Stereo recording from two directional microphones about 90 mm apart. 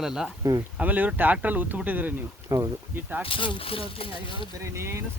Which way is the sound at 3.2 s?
70° left (ahead or behind).